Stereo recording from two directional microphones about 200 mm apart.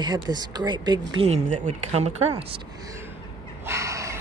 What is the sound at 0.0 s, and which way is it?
Speech, 20° right (ahead or behind).